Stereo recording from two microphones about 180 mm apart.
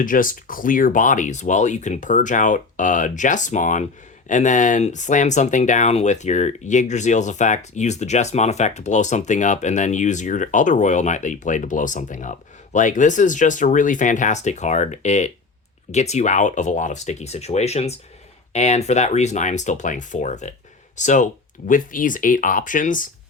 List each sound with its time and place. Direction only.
0.0 s speech: 50° left (ahead or behind)